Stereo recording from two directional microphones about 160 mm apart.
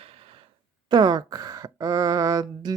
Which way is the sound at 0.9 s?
25° right (ahead or behind).